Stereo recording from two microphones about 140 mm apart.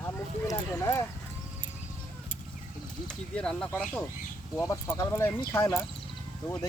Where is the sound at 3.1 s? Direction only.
5° left (ahead or behind).